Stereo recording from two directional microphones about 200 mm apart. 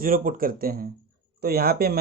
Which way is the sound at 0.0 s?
45° right (ahead or behind).